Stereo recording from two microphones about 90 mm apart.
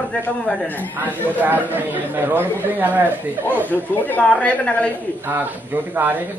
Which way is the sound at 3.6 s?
20° left (ahead or behind).